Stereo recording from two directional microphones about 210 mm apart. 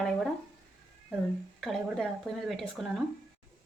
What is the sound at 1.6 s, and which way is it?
Speech, centre (ahead or behind).